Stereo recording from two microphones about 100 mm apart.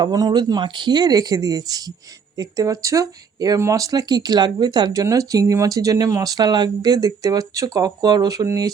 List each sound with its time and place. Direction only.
0.0 s speech: 40° right (ahead or behind)